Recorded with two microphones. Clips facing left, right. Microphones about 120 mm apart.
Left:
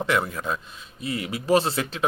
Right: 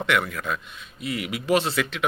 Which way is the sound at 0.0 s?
30° left (ahead or behind).